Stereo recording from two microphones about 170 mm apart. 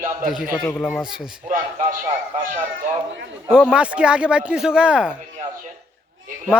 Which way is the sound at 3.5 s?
5° right (ahead or behind).